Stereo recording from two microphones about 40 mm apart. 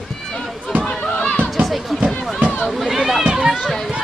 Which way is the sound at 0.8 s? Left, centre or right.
Left.